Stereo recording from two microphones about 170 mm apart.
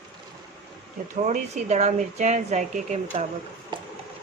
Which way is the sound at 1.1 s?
45° right (ahead or behind).